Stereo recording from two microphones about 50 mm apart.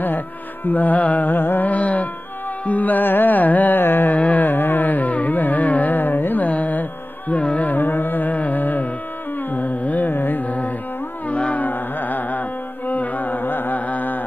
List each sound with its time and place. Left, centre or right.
0.7 s music: left
4.2 s carnatic music: left
9.5 s music: left
11.2 s a sound: left
11.6 s carnatic music: left